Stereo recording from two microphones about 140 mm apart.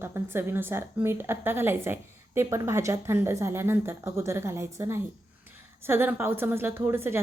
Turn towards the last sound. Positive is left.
turn(degrees=-15)  # may be behind; listen again after turning